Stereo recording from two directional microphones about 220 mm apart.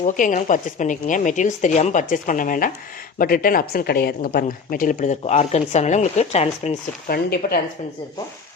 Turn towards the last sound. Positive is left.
turn(degrees=45)  # may be behind; listen again after turning